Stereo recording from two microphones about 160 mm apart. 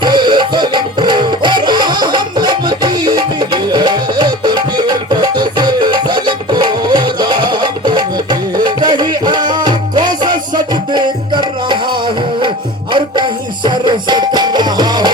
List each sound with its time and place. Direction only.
0.0 s music: 25° right (ahead or behind)